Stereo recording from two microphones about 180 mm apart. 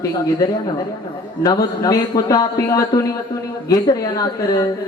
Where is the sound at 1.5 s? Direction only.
20° left (ahead or behind).